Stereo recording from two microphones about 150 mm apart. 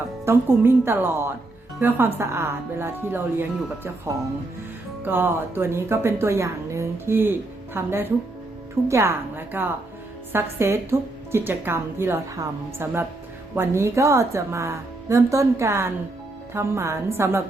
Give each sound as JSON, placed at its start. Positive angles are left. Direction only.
{"t": 0.3, "sound": "a woman's voice", "side_deg": -15}